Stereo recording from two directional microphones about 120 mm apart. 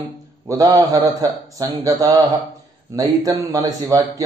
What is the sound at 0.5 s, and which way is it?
Speech, 30° right (ahead or behind).